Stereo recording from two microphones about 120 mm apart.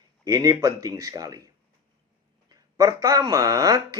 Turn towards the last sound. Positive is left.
turn(degrees=-30)  # may be behind; listen again after turning